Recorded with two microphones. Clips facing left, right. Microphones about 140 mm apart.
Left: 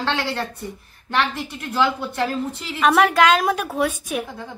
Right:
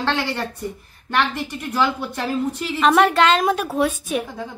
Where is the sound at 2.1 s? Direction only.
Centre (ahead or behind).